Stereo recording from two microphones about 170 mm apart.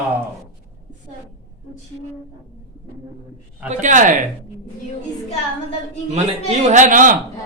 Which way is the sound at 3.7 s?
45° right (ahead or behind).